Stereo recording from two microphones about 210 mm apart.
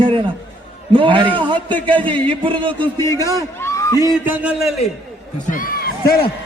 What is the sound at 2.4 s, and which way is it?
Speech, 25° right (ahead or behind).